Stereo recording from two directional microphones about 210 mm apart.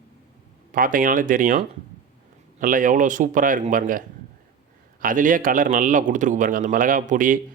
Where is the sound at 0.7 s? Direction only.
40° right (ahead or behind).